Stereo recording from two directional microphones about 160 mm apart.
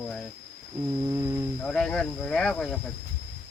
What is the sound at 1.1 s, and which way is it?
Speech, 20° right (ahead or behind).